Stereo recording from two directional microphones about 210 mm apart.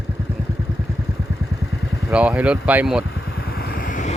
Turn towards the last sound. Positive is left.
turn(degrees=35)  # may be behind; listen again after turning